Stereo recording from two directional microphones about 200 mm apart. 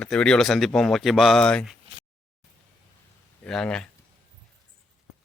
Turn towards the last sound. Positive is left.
turn(degrees=5)  # may be behind; listen again after turning